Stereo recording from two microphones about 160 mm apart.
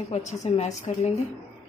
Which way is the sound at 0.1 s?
45° left (ahead or behind).